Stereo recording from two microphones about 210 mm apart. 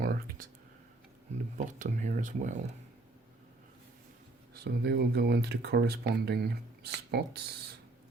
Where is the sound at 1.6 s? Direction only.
35° right (ahead or behind).